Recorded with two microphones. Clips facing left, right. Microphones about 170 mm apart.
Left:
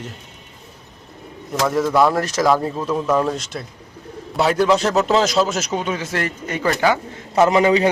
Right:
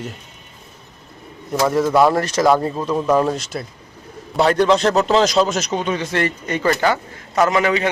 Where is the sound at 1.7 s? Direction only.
Centre (ahead or behind).